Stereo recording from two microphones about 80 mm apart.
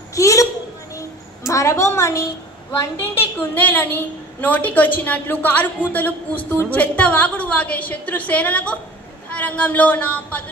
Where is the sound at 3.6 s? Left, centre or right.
Left.